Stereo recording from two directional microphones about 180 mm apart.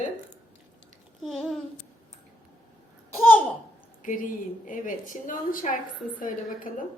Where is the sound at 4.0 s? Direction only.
45° left (ahead or behind).